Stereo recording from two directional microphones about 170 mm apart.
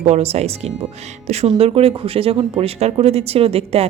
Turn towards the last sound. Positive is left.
turn(degrees=-35)  # may be behind; listen again after turning